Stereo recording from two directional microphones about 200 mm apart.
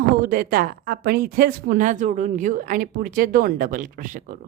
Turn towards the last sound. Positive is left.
turn(degrees=-45)  # may be behind; listen again after turning